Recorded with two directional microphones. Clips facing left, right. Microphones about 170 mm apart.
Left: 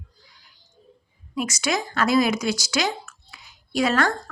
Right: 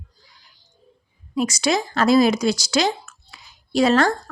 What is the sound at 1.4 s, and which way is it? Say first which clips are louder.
A woman's voice: right 5 dB; 30° right (ahead or behind).